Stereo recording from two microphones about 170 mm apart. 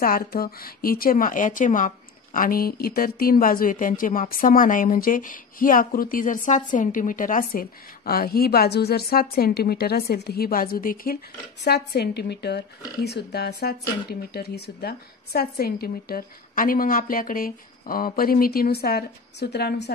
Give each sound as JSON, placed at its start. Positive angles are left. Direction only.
{"t": 0.0, "sound": "speech", "side_deg": 60}
{"t": 11.6, "sound": "speech", "side_deg": 70}